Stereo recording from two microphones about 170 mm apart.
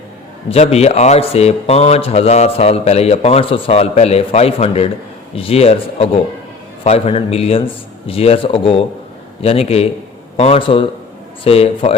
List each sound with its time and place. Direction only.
0.5 s speech: 35° left (ahead or behind)